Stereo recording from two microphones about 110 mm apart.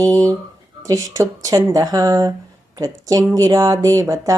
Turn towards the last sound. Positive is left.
turn(degrees=-30)  # may be behind; listen again after turning